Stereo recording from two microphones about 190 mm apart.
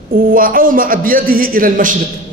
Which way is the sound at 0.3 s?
45° right (ahead or behind).